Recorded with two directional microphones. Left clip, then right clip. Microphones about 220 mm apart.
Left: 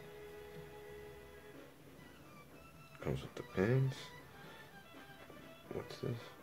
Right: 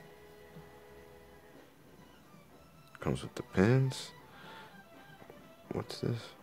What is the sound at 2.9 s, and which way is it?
Speech, 40° right (ahead or behind).